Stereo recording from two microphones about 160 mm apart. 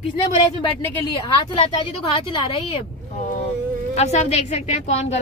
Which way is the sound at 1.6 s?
35° left (ahead or behind).